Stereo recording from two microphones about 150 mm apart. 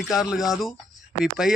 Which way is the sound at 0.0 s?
Centre (ahead or behind).